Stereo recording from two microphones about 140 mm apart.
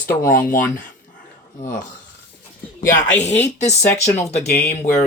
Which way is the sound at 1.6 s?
70° left (ahead or behind).